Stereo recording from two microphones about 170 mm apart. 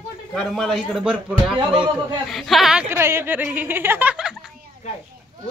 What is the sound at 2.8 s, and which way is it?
Speech, 15° right (ahead or behind).